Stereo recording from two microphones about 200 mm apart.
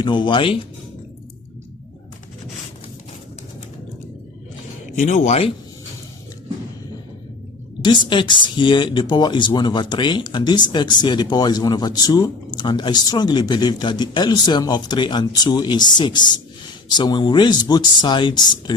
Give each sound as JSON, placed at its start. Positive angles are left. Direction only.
{"t": 0.0, "sound": "speech", "side_deg": 25}
{"t": 5.0, "sound": "speech", "side_deg": 35}
{"t": 7.8, "sound": "speech", "side_deg": 25}